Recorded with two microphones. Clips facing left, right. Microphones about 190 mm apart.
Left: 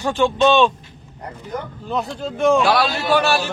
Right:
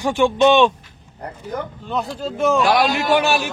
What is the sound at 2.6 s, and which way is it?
Speech, 15° right (ahead or behind).